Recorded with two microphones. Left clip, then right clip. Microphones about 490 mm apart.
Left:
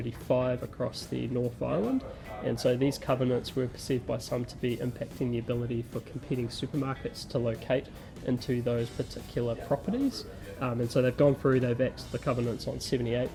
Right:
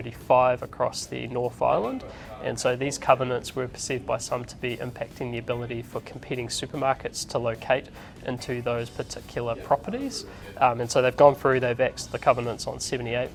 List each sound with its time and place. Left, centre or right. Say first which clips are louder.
0.0 s speech: right 9 dB; right